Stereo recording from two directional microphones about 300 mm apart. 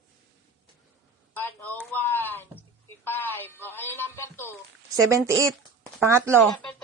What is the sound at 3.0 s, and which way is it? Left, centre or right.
Music, centre.